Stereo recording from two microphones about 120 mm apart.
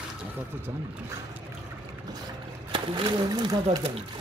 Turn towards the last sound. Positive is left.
turn(degrees=-40)  # may be behind; listen again after turning